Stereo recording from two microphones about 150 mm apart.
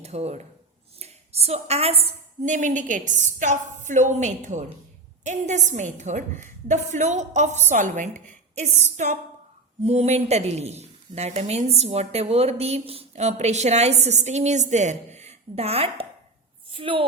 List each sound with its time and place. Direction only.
0.0 s a woman's voice: 45° right (ahead or behind)
2.5 s a woman's voice: 55° right (ahead or behind)
8.3 s a sound: 55° right (ahead or behind)
9.8 s a woman's voice: 45° right (ahead or behind)